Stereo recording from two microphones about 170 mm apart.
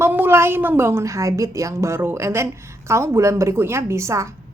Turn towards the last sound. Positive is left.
turn(degrees=-15)  # may be behind; listen again after turning